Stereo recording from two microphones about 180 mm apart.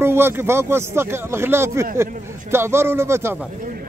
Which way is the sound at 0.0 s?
15° right (ahead or behind).